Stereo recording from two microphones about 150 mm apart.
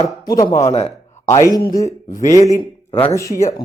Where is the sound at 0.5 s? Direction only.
45° left (ahead or behind).